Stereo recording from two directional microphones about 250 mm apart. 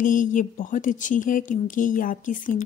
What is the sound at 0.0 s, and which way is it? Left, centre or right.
Speech, left.